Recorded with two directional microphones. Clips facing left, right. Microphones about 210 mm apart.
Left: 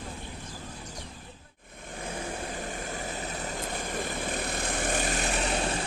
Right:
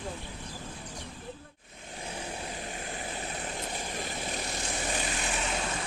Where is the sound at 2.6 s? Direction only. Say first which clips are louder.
Left 3 dB; 50° left (ahead or behind).